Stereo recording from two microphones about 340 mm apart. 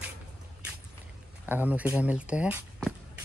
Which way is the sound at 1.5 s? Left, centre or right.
Centre.